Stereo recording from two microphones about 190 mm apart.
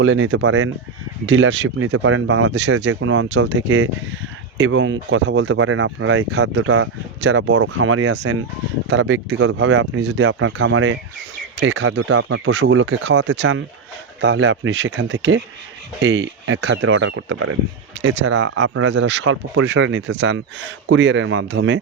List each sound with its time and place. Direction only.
0.0 s speech: 85° right
1.3 s speech: 75° right (ahead or behind)
16.0 s speech: 85° right
18.0 s speech: 70° right (ahead or behind)